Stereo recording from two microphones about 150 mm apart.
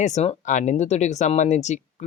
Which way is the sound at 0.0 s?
50° left (ahead or behind).